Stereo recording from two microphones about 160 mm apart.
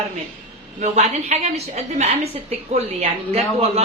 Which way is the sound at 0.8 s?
45° right (ahead or behind).